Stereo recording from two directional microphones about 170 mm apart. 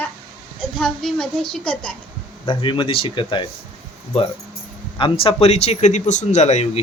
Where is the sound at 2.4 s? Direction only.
30° left (ahead or behind).